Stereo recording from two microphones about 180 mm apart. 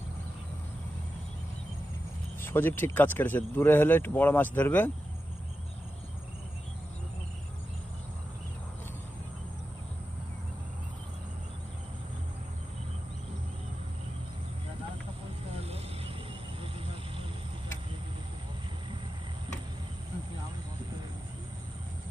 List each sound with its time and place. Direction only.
2.4 s speech: 10° left (ahead or behind)
15.6 s vehicle: 35° right (ahead or behind)